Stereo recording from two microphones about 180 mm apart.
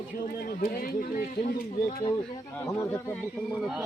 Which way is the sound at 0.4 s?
55° left (ahead or behind).